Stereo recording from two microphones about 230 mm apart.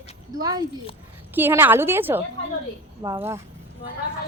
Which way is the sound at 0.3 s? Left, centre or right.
Centre.